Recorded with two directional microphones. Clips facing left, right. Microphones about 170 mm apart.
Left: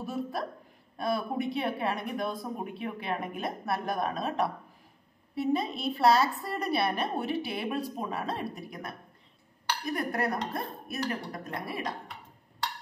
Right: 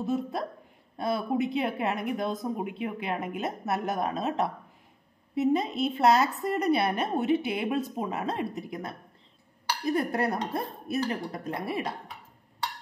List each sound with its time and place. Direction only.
0.0 s a woman's voice: 25° right (ahead or behind)